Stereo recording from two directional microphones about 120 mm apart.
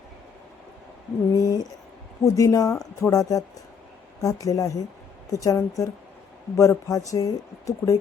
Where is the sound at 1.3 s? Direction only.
30° left (ahead or behind).